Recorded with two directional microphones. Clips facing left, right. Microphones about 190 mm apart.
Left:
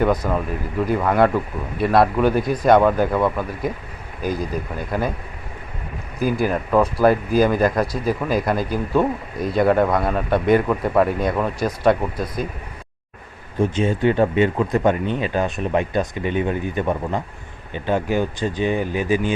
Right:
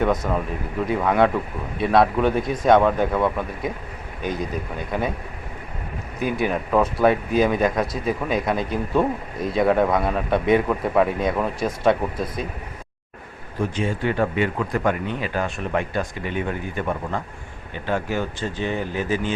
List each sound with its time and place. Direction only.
0.0 s speech: centre (ahead or behind)
6.4 s speech: centre (ahead or behind)
13.6 s speech: 25° left (ahead or behind)